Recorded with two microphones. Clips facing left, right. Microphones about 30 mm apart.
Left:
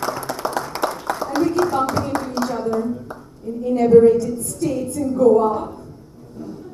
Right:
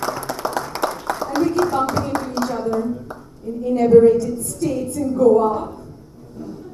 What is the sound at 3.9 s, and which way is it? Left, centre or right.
A woman's voice, centre.